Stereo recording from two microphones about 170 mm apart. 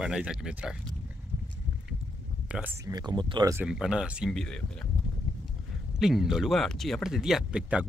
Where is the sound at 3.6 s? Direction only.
5° right (ahead or behind).